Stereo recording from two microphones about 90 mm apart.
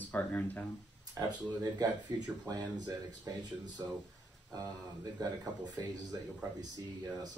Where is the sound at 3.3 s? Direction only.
45° right (ahead or behind).